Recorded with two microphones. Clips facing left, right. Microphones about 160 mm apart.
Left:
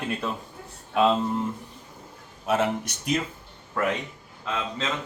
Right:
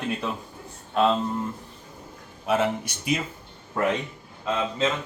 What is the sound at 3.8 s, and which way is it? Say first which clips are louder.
Speech: right 2 dB; 20° right (ahead or behind).